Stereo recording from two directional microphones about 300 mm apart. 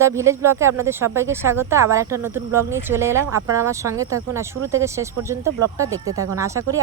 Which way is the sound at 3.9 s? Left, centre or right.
Right.